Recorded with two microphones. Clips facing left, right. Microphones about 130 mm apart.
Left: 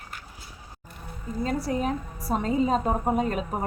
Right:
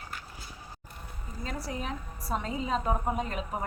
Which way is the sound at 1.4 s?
40° left (ahead or behind).